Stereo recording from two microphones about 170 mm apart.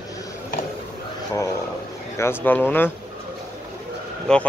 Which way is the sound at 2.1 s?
15° left (ahead or behind).